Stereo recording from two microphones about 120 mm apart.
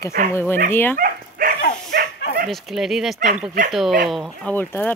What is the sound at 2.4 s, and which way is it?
Speech, centre (ahead or behind).